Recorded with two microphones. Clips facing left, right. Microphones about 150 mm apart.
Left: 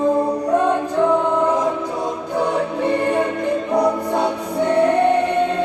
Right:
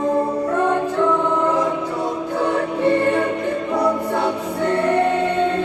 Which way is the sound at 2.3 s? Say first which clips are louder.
Left 1 dB; 15° left (ahead or behind).